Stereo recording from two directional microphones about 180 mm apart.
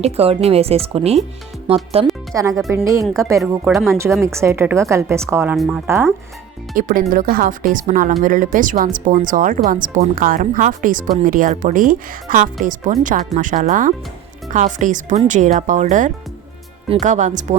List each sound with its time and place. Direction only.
0.0 s speech: 35° right (ahead or behind)
2.3 s a woman's voice: 20° right (ahead or behind)
6.7 s speech: 50° right (ahead or behind)